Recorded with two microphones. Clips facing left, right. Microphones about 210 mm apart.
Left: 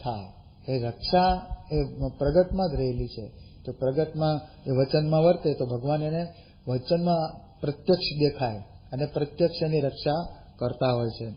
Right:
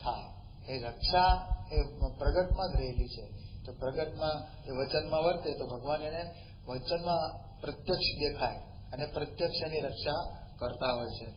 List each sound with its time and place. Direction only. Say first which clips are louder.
0.7 s a man's voice: left 9 dB; 35° left (ahead or behind)